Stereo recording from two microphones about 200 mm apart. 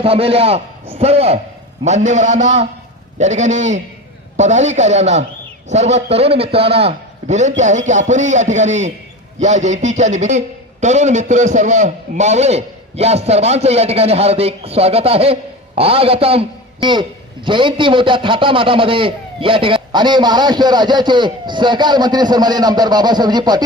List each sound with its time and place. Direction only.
0.0 s a man's voice: 30° right (ahead or behind)